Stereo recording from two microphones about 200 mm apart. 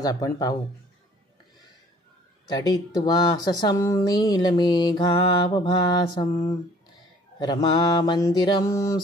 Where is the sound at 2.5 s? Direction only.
20° left (ahead or behind).